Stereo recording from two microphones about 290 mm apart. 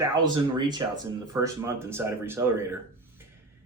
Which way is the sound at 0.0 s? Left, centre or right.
Centre.